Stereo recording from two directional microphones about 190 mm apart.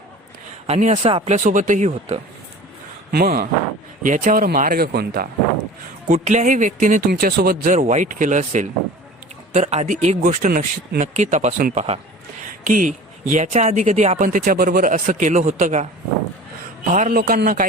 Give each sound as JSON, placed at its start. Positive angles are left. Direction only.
{"t": 0.7, "sound": "speech", "side_deg": -40}
{"t": 3.1, "sound": "speech", "side_deg": -50}
{"t": 6.1, "sound": "speech", "side_deg": -40}
{"t": 14.3, "sound": "speech", "side_deg": -50}
{"t": 16.9, "sound": "speech", "side_deg": -40}